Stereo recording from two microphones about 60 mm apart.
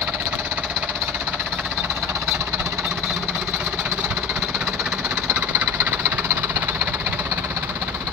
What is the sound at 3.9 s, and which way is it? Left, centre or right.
Jackhammer, centre.